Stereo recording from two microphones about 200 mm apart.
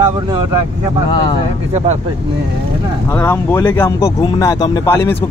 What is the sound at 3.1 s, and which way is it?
A man's voice, 10° left (ahead or behind).